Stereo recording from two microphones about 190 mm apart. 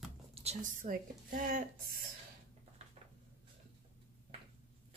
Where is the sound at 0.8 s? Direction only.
45° right (ahead or behind).